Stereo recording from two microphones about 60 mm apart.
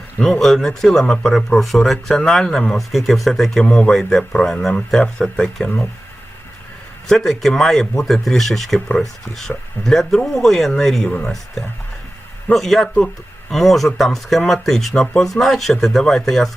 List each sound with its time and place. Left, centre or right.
0.3 s speech: centre
3.6 s speech: centre
7.1 s speech: centre
12.5 s speech: centre